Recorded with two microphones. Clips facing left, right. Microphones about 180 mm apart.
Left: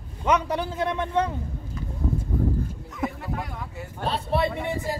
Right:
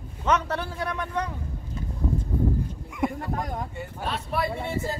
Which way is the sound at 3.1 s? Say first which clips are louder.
Right 3 dB; 40° right (ahead or behind).